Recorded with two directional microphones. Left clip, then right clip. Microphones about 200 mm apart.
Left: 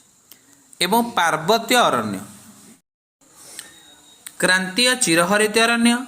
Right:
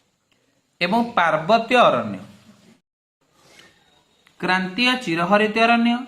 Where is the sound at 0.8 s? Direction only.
30° left (ahead or behind).